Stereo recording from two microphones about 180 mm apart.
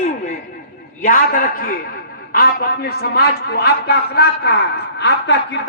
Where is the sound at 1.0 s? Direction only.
50° left (ahead or behind).